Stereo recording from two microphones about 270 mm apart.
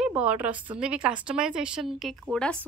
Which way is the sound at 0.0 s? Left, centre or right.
Centre.